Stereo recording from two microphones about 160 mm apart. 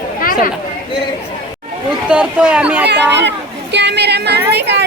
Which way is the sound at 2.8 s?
90° right.